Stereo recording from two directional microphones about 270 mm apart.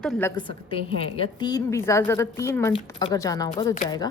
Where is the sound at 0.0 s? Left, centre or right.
Centre.